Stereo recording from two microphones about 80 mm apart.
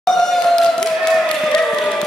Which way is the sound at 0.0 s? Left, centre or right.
Centre.